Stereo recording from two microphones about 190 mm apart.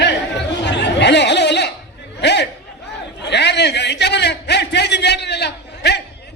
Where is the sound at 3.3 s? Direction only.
65° left (ahead or behind).